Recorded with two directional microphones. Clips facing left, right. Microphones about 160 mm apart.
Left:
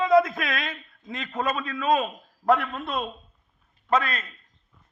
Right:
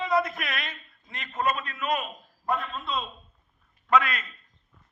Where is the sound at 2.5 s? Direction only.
65° left (ahead or behind).